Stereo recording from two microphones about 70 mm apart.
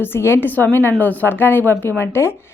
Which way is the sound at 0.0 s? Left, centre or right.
Left.